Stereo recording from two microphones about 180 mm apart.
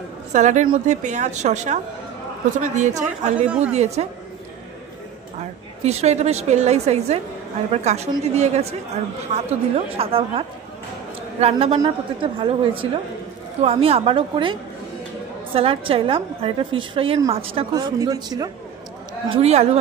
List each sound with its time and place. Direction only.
0.3 s a woman's voice: 40° right (ahead or behind)
3.4 s a woman's voice: 5° right (ahead or behind)
3.7 s a woman's voice: 40° right (ahead or behind)
5.9 s a woman's voice: 35° right (ahead or behind)
17.7 s a woman's voice: 20° right (ahead or behind)
19.2 s a woman's voice: 35° right (ahead or behind)